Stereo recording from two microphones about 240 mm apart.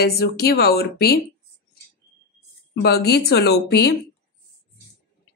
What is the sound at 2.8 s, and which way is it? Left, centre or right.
Speech, left.